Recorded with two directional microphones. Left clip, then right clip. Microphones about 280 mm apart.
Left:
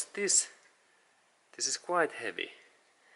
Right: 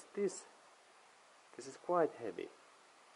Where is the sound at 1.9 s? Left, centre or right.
Centre.